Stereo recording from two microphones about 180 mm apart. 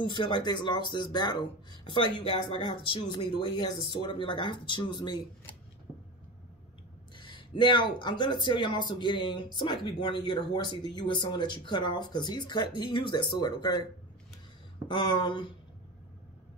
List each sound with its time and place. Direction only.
0.0 s speech: 25° left (ahead or behind)
7.2 s speech: 25° left (ahead or behind)
14.9 s speech: 25° left (ahead or behind)